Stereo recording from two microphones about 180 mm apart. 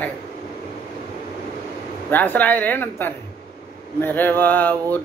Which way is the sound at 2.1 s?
10° left (ahead or behind).